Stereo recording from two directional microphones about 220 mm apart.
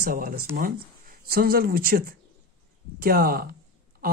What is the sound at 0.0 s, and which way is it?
Speech, 40° right (ahead or behind).